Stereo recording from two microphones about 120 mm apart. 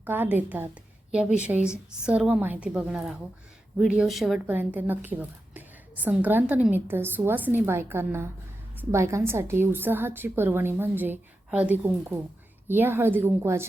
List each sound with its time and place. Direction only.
0.0 s a woman's voice: 15° right (ahead or behind)
4.4 s a woman's voice: 15° right (ahead or behind)